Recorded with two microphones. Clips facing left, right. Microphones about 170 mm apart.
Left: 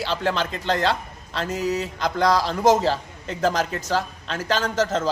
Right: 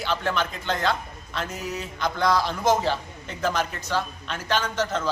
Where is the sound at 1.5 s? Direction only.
80° left.